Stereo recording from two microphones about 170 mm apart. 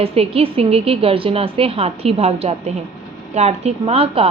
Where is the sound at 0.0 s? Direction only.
35° right (ahead or behind).